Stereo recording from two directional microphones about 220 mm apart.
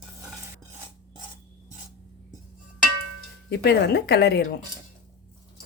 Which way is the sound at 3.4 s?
50° left (ahead or behind).